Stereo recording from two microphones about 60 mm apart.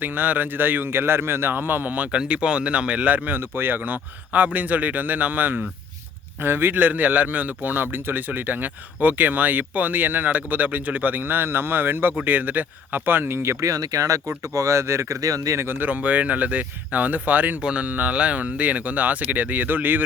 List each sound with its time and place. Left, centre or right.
0.0 s speech: right
2.1 s a man's voice: centre
3.4 s a man's voice: right
13.7 s speech: right
15.6 s speech: right
15.9 s a man's voice: right
17.6 s speech: centre
17.8 s a man's voice: right